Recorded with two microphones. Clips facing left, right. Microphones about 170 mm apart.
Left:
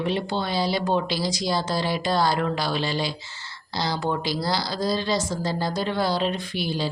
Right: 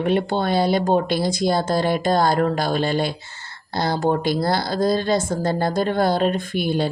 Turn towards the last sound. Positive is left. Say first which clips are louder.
# right 6 dB
turn(degrees=-55)  # may be behind; listen again after turning